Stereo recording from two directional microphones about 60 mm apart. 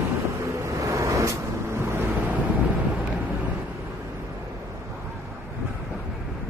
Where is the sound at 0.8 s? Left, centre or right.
Right.